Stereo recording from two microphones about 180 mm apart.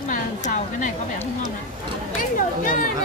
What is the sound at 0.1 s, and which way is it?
Speech, 45° left (ahead or behind).